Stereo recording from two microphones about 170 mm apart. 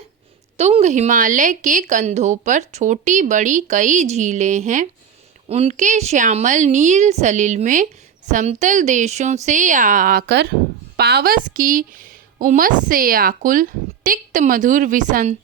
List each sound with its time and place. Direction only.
0.5 s a woman's voice: 40° right (ahead or behind)